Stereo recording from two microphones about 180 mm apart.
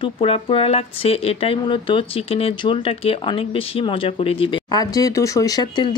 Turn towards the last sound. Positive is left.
turn(degrees=20)  # may be behind; listen again after turning